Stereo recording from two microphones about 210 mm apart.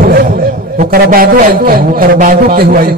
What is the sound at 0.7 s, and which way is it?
A man's voice, 45° right (ahead or behind).